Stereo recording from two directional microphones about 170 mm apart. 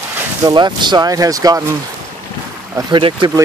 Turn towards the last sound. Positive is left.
turn(degrees=-30)  # may be behind; listen again after turning